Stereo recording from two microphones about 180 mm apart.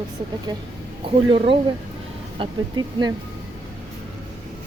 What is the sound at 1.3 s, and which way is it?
Speech, 30° right (ahead or behind).